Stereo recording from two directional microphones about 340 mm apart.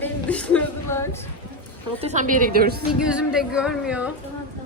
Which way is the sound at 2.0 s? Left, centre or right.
Right.